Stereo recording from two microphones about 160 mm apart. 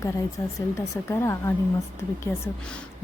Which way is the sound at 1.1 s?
15° left (ahead or behind).